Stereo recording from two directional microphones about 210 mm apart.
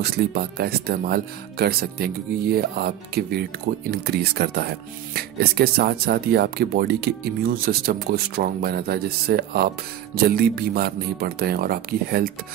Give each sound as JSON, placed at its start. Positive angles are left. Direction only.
{"t": 0.0, "sound": "speech", "side_deg": -50}